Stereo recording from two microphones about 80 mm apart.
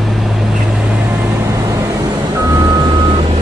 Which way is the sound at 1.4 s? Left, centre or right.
Right.